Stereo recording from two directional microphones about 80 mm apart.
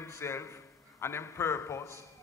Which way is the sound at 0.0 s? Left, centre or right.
Left.